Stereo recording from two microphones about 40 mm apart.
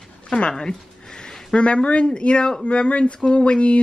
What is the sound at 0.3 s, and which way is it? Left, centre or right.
Speech, left.